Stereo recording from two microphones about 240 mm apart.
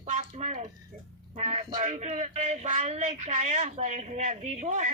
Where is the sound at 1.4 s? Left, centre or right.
Right.